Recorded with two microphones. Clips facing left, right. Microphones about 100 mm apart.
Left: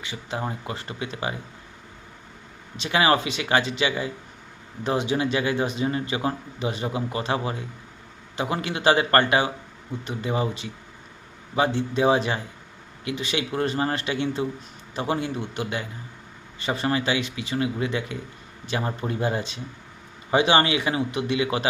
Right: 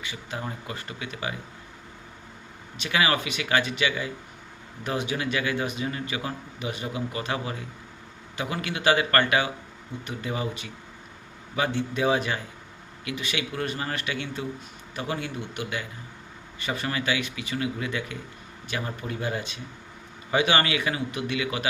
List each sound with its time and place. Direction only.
0.0 s a man's voice: 25° left (ahead or behind)
2.7 s a man's voice: 25° left (ahead or behind)